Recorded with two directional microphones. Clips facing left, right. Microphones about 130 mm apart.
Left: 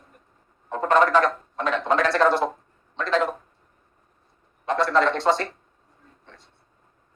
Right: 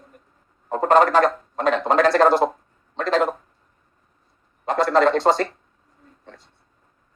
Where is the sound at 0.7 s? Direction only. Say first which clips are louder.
Right 3 dB; 40° right (ahead or behind).